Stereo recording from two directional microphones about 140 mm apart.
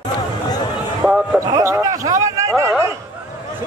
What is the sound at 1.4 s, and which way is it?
Speech, 25° right (ahead or behind).